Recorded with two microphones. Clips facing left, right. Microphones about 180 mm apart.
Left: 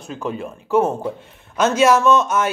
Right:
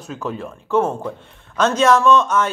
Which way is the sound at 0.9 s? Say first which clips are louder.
Left 2 dB; 5° left (ahead or behind).